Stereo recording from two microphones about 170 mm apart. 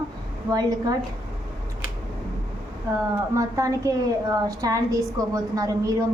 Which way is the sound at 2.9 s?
15° right (ahead or behind).